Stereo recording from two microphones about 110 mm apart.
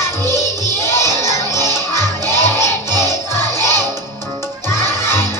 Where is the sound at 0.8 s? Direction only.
25° left (ahead or behind).